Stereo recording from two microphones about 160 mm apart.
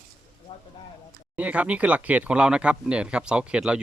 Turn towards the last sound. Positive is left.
turn(degrees=-5)  # may be behind; listen again after turning